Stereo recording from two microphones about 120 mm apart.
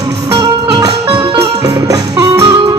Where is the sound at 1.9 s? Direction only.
25° right (ahead or behind).